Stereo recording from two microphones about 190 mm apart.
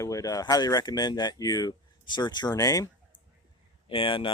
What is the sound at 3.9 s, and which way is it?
Speech, 30° left (ahead or behind).